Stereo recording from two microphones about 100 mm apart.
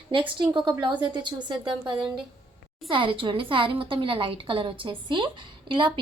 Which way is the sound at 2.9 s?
60° right (ahead or behind).